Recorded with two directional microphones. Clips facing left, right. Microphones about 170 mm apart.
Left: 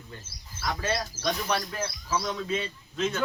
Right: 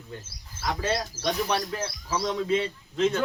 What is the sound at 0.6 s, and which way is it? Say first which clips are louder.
Speech: right 2 dB; 25° right (ahead or behind).